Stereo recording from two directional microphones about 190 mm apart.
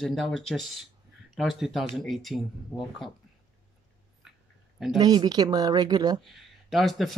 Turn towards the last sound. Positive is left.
turn(degrees=0)  # may be behind; listen again after turning